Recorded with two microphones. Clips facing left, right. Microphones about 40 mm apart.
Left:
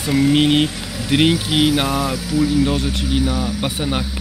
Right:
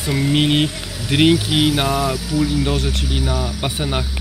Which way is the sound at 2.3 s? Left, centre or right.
Left.